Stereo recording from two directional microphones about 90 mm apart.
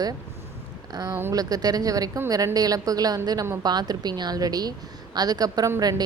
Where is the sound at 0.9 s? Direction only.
45° right (ahead or behind).